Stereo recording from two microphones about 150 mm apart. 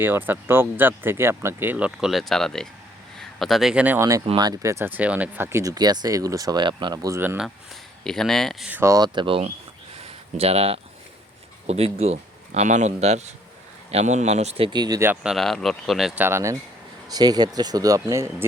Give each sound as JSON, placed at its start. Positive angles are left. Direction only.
{"t": 0.0, "sound": "speech", "side_deg": -15}
{"t": 4.4, "sound": "speech", "side_deg": -25}
{"t": 8.0, "sound": "speech", "side_deg": 5}
{"t": 8.7, "sound": "speech", "side_deg": -20}
{"t": 9.1, "sound": "speech", "side_deg": -35}
{"t": 15.0, "sound": "speech", "side_deg": -10}
{"t": 16.2, "sound": "speech", "side_deg": -20}